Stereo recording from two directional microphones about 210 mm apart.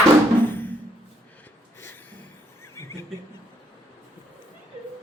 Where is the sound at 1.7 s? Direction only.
10° left (ahead or behind).